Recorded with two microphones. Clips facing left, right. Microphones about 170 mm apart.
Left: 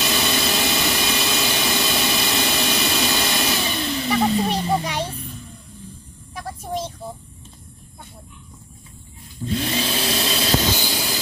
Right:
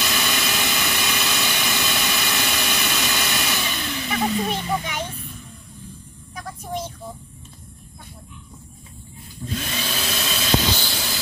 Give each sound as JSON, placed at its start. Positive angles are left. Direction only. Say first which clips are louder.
{"t": 0.0, "sound": "vehicle", "louder": "left 3 dB", "side_deg": 30}
{"t": 9.4, "sound": "vehicle", "louder": "left 5 dB", "side_deg": 15}
{"t": 9.8, "sound": "vehicle", "louder": "left 5 dB", "side_deg": 30}
{"t": 10.8, "sound": "vehicle", "louder": "left 4 dB", "side_deg": 15}